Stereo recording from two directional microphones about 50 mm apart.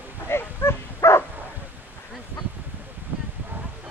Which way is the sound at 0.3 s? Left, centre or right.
Left.